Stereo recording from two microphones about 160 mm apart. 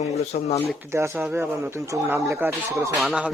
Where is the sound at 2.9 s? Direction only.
Centre (ahead or behind).